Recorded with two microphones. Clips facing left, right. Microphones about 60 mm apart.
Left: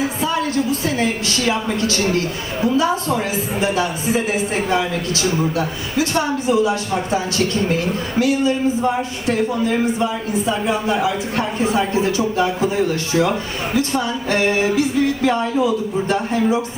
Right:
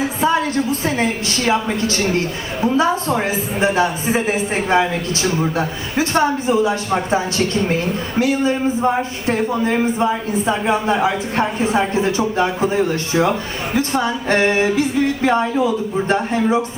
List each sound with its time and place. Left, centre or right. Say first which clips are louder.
0.0 s a man's voice: right 3 dB; right